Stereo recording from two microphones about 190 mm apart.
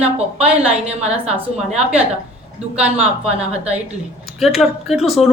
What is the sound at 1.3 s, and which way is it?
Speech, 35° right (ahead or behind).